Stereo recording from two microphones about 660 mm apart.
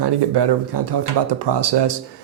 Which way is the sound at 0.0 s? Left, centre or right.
Right.